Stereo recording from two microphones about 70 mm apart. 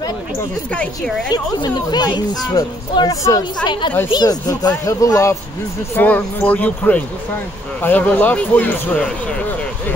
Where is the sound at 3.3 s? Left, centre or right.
Left.